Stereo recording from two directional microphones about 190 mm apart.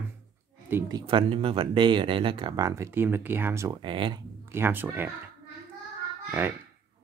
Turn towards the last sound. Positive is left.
turn(degrees=-10)  # may be behind; listen again after turning